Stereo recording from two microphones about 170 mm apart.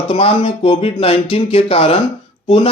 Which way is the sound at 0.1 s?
30° left (ahead or behind).